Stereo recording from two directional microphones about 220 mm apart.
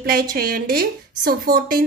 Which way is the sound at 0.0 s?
40° right (ahead or behind).